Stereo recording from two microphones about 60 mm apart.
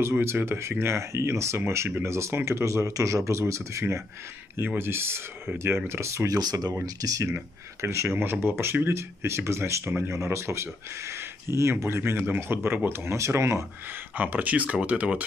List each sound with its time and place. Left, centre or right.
0.0 s speech: right
4.7 s speech: right
6.2 s speech: right
7.0 s speech: right
7.2 s speech: right
8.2 s speech: right
14.1 s speech: right